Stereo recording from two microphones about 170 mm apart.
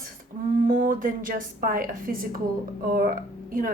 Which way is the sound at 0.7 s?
55° right (ahead or behind).